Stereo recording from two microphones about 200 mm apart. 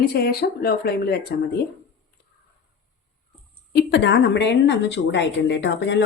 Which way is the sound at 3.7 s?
55° left (ahead or behind).